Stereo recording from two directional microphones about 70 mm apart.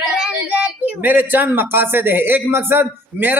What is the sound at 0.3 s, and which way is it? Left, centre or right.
Speech, centre.